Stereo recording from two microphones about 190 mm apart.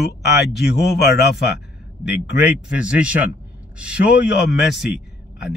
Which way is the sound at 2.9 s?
5° right (ahead or behind).